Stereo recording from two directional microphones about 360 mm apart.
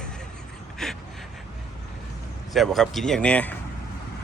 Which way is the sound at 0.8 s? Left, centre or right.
Centre.